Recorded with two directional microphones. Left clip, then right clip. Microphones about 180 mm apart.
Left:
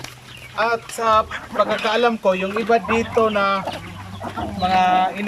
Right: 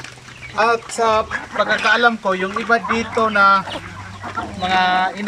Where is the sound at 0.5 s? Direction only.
15° right (ahead or behind).